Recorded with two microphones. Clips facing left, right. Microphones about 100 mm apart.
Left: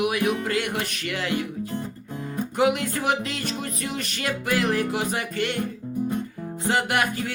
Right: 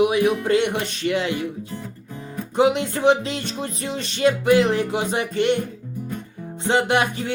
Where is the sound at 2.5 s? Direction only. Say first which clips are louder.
Right 4 dB; 25° right (ahead or behind).